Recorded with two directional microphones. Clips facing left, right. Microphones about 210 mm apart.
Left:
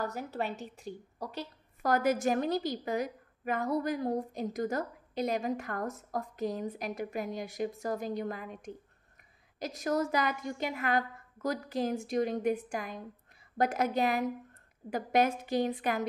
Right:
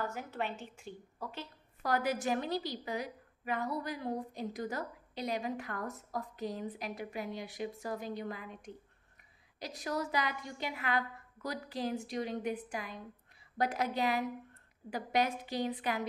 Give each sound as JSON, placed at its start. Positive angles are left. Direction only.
{"t": 0.0, "sound": "a woman's voice", "side_deg": 40}